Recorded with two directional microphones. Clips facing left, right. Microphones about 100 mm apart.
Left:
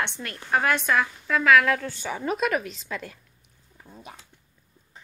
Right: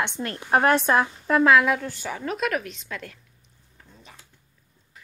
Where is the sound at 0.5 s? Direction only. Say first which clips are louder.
Right 4 dB; 35° right (ahead or behind).